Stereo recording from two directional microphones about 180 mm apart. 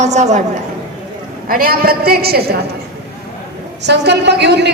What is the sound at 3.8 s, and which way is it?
Speech, 70° right (ahead or behind).